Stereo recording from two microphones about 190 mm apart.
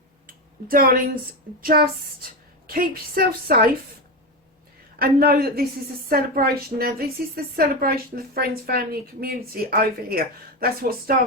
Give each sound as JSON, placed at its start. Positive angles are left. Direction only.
{"t": 0.3, "sound": "a woman's voice", "side_deg": -50}
{"t": 4.9, "sound": "a woman's voice", "side_deg": -55}